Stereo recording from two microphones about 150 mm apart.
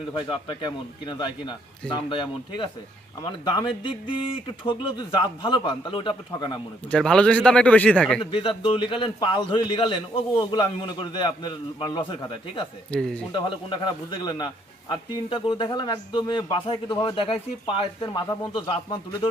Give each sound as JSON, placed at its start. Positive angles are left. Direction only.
{"t": 0.1, "sound": "a man's voice", "side_deg": 35}
{"t": 6.9, "sound": "speech", "side_deg": 5}
{"t": 8.2, "sound": "a man's voice", "side_deg": 35}
{"t": 12.9, "sound": "speech", "side_deg": 5}
{"t": 13.3, "sound": "a man's voice", "side_deg": 30}